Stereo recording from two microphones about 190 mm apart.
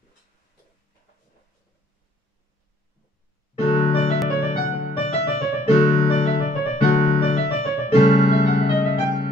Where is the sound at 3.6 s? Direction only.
30° left (ahead or behind).